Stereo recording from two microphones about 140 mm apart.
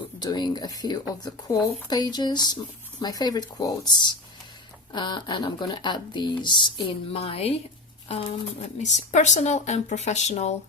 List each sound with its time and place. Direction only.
0.2 s speech: 30° left (ahead or behind); by 10.5 s 50° left (ahead or behind)